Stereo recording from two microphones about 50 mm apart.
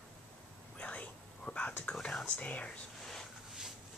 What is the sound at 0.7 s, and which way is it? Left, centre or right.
Whispering, left.